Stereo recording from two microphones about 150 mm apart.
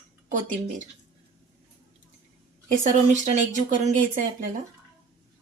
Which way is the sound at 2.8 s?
55° right (ahead or behind).